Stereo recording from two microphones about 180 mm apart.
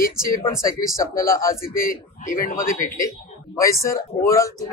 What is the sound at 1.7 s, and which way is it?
Speech, 50° left (ahead or behind).